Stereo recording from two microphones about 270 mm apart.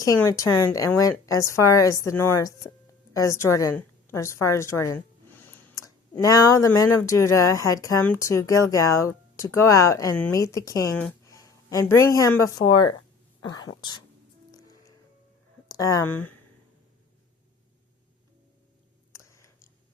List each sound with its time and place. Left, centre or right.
0.0 s a woman's voice: centre
12.7 s speech: left
14.5 s music: centre
15.8 s speech: centre
19.1 s a sound: centre